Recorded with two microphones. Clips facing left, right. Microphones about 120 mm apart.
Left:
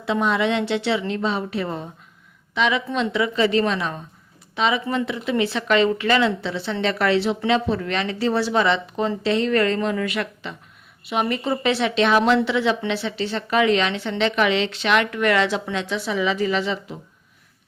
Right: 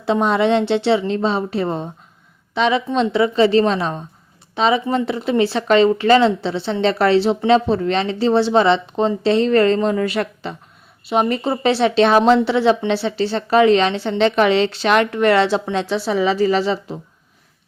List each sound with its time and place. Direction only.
0.0 s a woman's voice: 35° right (ahead or behind)